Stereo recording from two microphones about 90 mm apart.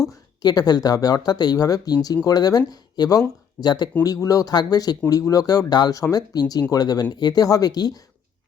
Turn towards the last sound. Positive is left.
turn(degrees=45)  # may be behind; listen again after turning